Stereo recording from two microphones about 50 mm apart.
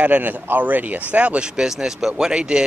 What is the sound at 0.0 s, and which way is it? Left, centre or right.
Speech, right.